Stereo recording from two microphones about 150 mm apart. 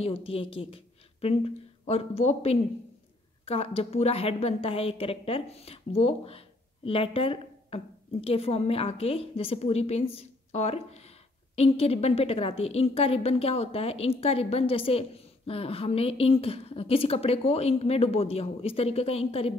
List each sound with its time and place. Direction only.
0.0 s a woman's voice: 40° left (ahead or behind)